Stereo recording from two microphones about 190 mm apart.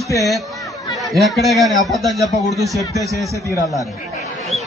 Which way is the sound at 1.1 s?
Centre (ahead or behind).